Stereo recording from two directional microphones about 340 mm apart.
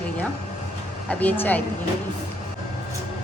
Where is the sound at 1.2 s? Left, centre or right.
Centre.